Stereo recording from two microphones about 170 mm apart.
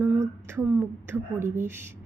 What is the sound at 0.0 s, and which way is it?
A woman's voice, 10° right (ahead or behind).